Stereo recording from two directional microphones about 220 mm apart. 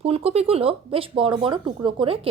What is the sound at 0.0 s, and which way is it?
Speech, 25° right (ahead or behind).